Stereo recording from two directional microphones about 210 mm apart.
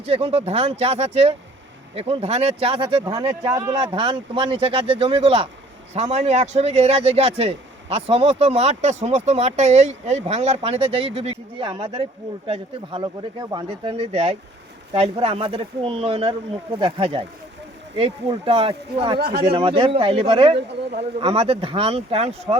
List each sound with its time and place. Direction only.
0.0 s a man's voice: 30° right (ahead or behind)
19.2 s speech: 50° right (ahead or behind)
19.5 s speech: 25° right (ahead or behind)